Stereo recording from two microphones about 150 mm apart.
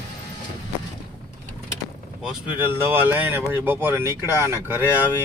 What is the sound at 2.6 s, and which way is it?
Speech, 15° right (ahead or behind).